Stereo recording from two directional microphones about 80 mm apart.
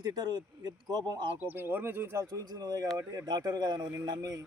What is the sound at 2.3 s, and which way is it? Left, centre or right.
Speech, right.